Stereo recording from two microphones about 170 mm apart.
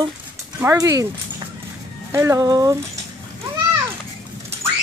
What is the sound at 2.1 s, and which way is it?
Speech, 15° right (ahead or behind).